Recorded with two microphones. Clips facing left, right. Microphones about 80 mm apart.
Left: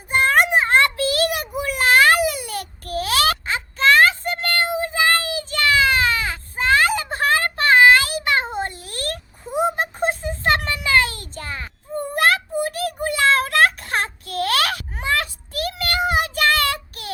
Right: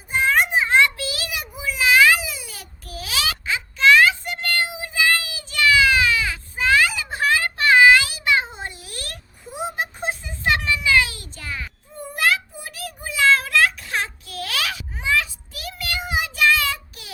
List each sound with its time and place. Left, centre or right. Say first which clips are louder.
0.1 s child singing: left 3 dB; left
11.9 s child singing: left 3 dB; left